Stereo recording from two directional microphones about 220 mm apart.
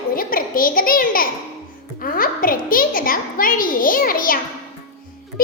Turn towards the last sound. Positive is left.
turn(degrees=40)  # may be behind; listen again after turning